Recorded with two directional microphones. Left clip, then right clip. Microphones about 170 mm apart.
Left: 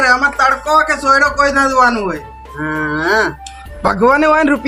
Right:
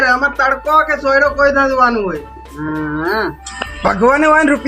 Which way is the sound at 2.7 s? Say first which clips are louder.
Left 3 dB; 5° left (ahead or behind).